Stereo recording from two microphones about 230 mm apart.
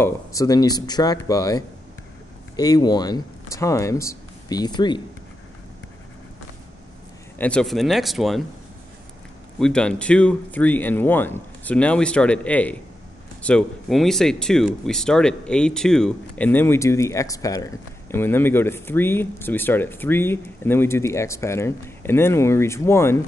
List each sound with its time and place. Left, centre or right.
0.0 s speech: centre
7.3 s speech: centre
9.6 s speech: centre